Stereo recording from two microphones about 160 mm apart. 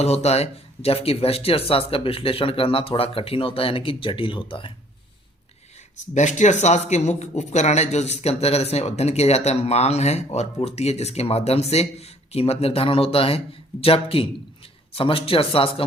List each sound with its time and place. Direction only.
0.0 s speech: 40° left (ahead or behind)
6.1 s speech: 50° left (ahead or behind)